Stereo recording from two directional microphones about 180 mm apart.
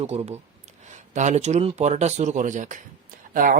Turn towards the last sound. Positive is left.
turn(degrees=-50)  # may be behind; listen again after turning